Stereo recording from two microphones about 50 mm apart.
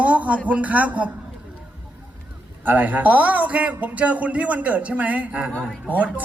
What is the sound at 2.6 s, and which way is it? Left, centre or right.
A man's voice, right.